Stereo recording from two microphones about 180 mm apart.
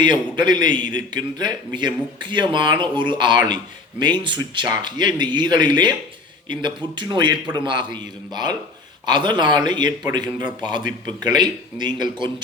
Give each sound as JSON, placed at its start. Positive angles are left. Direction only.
{"t": 0.0, "sound": "speech", "side_deg": -25}